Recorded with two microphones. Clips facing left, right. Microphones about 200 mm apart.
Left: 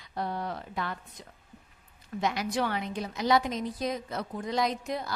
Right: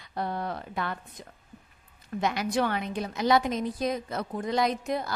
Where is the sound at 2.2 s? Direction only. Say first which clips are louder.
Right 2 dB; 55° right (ahead or behind).